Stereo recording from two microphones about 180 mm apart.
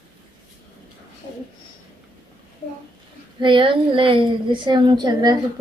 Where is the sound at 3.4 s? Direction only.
25° right (ahead or behind).